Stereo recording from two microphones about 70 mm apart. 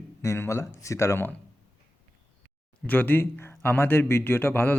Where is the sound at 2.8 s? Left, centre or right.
Left.